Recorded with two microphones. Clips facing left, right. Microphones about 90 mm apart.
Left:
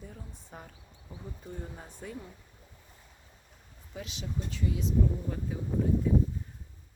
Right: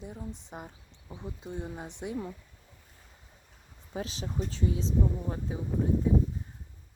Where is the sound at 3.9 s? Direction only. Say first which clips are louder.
Right 3 dB; 35° right (ahead or behind).